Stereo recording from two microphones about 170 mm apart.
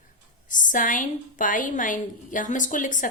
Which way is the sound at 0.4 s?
50° left (ahead or behind).